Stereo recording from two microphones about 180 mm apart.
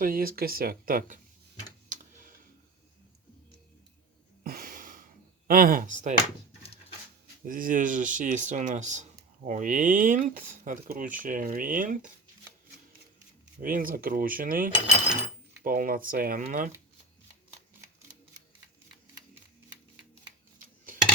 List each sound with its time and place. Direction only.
0.0 s speech: 55° right (ahead or behind)
1.9 s computer keyboard: 45° right (ahead or behind)
4.4 s a sound: 55° right (ahead or behind)
5.5 s speech: 50° right (ahead or behind)
7.4 s speech: 50° right (ahead or behind)
13.6 s speech: 50° right (ahead or behind)